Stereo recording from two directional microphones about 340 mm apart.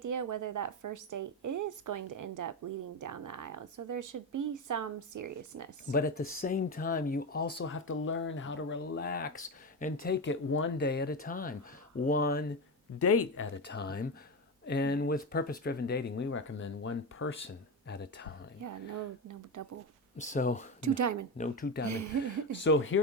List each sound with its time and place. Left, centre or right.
0.0 s a woman's voice: right
5.9 s speech: left
13.0 s speech: left
18.6 s a woman's voice: right
20.1 s speech: left
20.8 s a woman's voice: right
21.3 s speech: left
21.8 s a woman's voice: right
22.5 s speech: left